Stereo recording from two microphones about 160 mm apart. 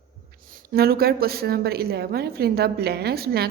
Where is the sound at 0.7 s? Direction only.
75° right (ahead or behind).